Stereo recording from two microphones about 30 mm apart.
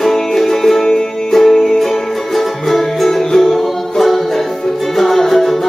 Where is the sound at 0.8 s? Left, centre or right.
Left.